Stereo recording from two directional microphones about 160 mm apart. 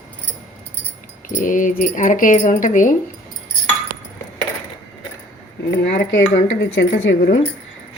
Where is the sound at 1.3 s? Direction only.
55° left (ahead or behind).